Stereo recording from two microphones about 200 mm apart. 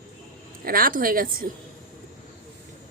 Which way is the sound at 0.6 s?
45° right (ahead or behind).